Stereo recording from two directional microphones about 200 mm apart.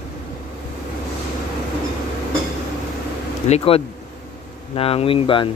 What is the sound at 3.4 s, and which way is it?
Speech, 30° left (ahead or behind).